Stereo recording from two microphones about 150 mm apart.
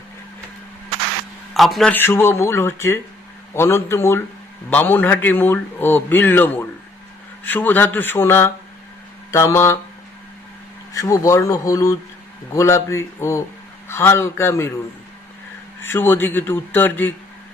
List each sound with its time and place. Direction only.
1.5 s a man's voice: centre (ahead or behind)
2.0 s a man's voice: 15° left (ahead or behind)
10.9 s a man's voice: 20° left (ahead or behind)
15.8 s a man's voice: 15° left (ahead or behind)